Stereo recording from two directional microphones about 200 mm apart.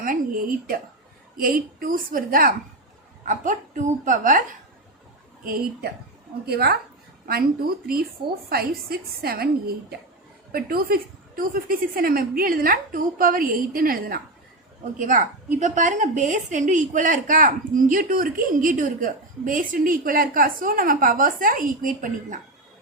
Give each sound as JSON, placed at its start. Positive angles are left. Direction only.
{"t": 0.0, "sound": "a woman's voice", "side_deg": -45}
{"t": 5.5, "sound": "a woman's voice", "side_deg": -45}
{"t": 8.4, "sound": "a woman's voice", "side_deg": -50}
{"t": 10.5, "sound": "a woman's voice", "side_deg": -45}